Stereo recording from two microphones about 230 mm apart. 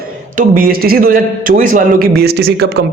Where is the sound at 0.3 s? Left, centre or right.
Right.